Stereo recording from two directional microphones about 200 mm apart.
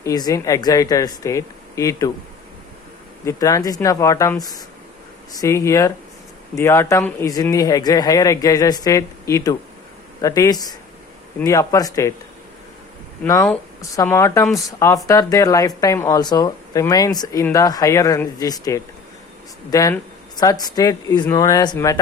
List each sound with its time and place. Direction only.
0.0 s speech: 20° left (ahead or behind)
3.2 s speech: 15° left (ahead or behind)
13.2 s speech: 15° left (ahead or behind)